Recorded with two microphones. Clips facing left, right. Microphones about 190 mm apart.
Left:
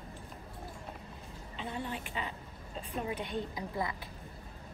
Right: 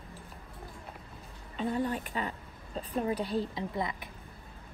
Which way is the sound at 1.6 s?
40° right (ahead or behind).